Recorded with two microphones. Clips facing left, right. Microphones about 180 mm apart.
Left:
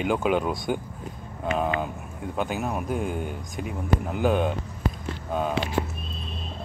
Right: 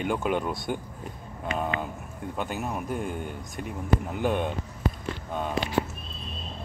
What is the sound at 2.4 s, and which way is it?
Speech, 5° left (ahead or behind).